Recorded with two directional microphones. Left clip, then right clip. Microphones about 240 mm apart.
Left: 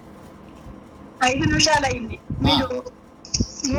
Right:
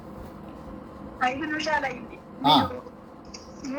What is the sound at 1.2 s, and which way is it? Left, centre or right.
Speech, left.